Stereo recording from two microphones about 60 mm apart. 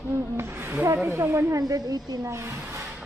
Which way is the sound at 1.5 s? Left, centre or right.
Right.